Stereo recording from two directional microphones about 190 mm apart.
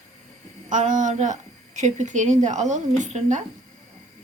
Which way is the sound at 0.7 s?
40° right (ahead or behind).